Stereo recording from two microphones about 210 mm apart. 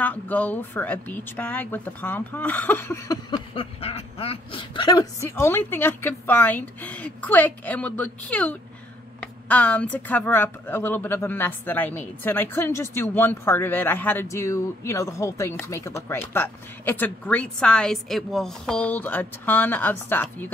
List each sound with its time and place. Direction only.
0.0 s speech: 10° left (ahead or behind)